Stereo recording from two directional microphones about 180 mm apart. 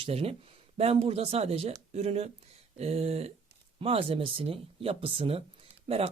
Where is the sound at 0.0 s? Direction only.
35° right (ahead or behind).